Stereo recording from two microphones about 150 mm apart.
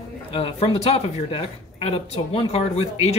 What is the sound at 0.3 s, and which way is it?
Speech, 40° left (ahead or behind).